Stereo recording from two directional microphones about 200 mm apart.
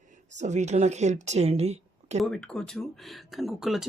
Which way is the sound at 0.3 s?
35° right (ahead or behind).